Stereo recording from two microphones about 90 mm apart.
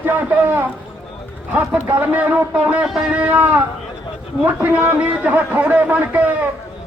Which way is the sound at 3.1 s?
15° right (ahead or behind).